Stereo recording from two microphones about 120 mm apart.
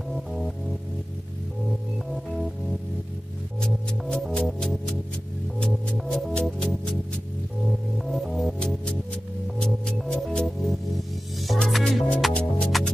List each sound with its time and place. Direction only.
0.1 s music: centre (ahead or behind)
1.7 s music: centre (ahead or behind)
3.6 s music: 5° left (ahead or behind)